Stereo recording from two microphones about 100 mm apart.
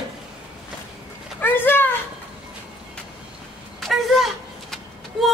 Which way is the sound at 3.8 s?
Centre (ahead or behind).